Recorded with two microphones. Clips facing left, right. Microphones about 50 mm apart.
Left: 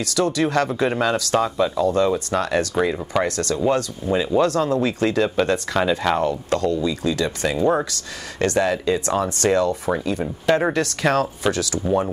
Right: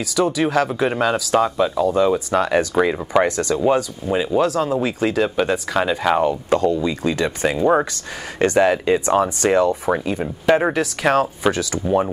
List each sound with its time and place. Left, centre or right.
0.0 s speech: centre